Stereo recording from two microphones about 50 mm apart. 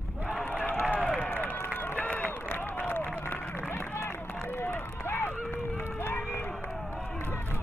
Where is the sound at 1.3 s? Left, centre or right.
Left.